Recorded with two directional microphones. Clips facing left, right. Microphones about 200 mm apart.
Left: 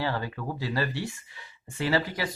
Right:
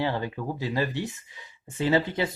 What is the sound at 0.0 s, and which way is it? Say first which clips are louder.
Speech: right 2 dB; 20° right (ahead or behind).